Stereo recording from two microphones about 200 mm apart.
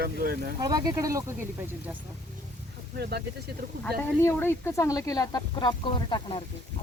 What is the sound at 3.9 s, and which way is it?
Speech, 10° left (ahead or behind).